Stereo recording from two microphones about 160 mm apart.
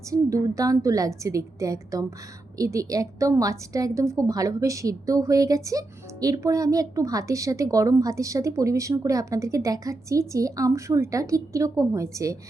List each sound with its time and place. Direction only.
0.1 s a woman's voice: 20° right (ahead or behind)